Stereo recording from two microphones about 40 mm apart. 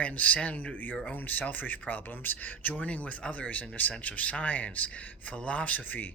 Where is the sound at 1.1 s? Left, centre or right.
Left.